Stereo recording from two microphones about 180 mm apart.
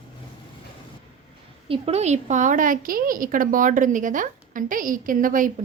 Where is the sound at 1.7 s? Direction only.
35° right (ahead or behind).